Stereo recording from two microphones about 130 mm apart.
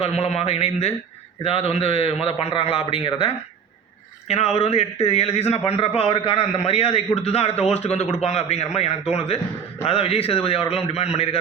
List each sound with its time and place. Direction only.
0.0 s a man's voice: 55° left (ahead or behind)